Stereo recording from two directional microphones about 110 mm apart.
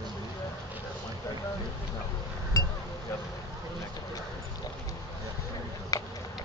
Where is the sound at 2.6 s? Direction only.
35° left (ahead or behind).